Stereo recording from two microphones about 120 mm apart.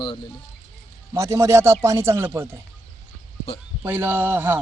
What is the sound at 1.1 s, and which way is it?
Speech, 25° right (ahead or behind).